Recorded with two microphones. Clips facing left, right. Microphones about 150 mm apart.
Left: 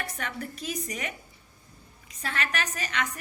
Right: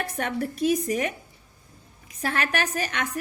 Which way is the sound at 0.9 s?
55° right (ahead or behind).